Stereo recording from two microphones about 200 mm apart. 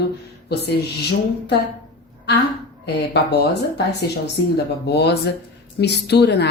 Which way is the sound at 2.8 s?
55° left (ahead or behind).